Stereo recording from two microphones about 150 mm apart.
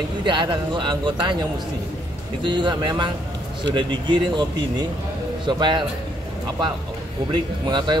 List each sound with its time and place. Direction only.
0.2 s speech: 35° right (ahead or behind)
2.4 s speech: 30° right (ahead or behind)
7.3 s speech: 30° right (ahead or behind)